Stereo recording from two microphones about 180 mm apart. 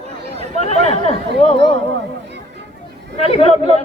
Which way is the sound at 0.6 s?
35° left (ahead or behind).